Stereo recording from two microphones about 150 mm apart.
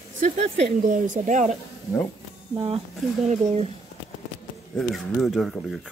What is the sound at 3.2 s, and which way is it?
Speech, 45° right (ahead or behind).